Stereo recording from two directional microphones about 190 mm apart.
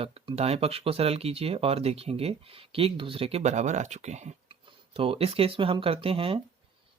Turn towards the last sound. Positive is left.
turn(degrees=-30)  # may be behind; listen again after turning